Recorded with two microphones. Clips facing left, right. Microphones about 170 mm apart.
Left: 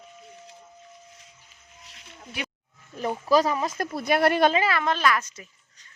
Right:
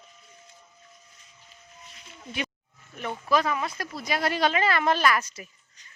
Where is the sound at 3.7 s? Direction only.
55° left (ahead or behind).